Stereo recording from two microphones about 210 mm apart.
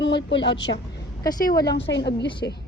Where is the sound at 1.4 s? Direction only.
45° left (ahead or behind).